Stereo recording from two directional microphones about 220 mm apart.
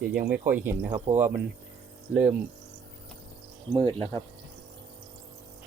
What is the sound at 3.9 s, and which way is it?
Speech, 25° right (ahead or behind).